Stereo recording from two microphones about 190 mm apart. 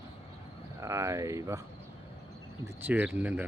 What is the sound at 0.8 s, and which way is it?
Speech, 15° right (ahead or behind).